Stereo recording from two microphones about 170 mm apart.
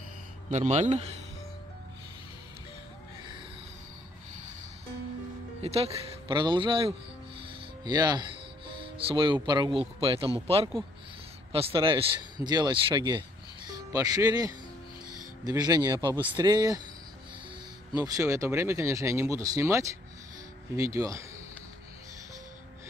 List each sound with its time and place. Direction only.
0.5 s speech: 40° right (ahead or behind)
5.6 s speech: 35° right (ahead or behind)
7.3 s music: 25° right (ahead or behind)
8.8 s speech: 30° right (ahead or behind)
17.9 s speech: 20° right (ahead or behind)